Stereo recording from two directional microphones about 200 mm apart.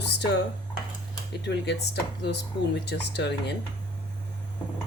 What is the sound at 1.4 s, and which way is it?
Speech, 60° left (ahead or behind).